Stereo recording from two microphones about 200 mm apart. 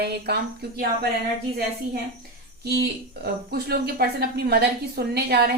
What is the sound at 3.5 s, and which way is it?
A woman's voice, 50° right (ahead or behind).